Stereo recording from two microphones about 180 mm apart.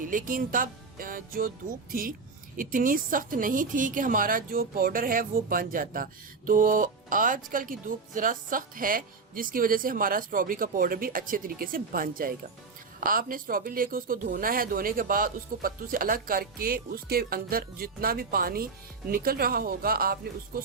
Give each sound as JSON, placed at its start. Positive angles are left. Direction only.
{"t": 0.0, "sound": "music", "side_deg": -50}
{"t": 1.9, "sound": "a woman's voice", "side_deg": -50}